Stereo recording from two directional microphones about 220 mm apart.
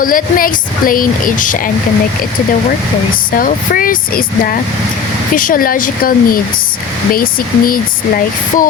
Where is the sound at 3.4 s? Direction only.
40° left (ahead or behind).